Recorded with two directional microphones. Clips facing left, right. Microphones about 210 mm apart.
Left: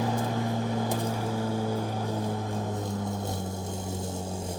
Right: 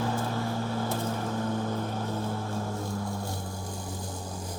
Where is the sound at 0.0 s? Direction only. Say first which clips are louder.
Left 2 dB; 15° left (ahead or behind).